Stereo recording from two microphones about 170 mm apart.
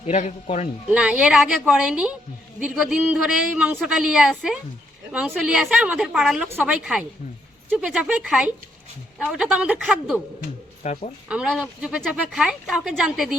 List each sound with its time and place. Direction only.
0.0 s speech: 45° left (ahead or behind)
0.9 s a woman's voice: 10° right (ahead or behind)
10.8 s speech: 40° left (ahead or behind)
11.3 s a woman's voice: 5° right (ahead or behind)